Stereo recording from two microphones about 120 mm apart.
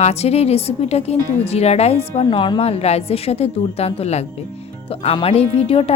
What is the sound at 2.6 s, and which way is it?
A woman's voice, 60° left (ahead or behind).